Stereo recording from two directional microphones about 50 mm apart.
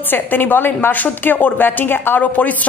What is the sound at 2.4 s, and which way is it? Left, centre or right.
Speech, left.